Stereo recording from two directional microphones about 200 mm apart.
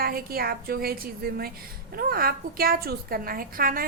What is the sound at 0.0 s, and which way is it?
A woman's voice, 50° right (ahead or behind).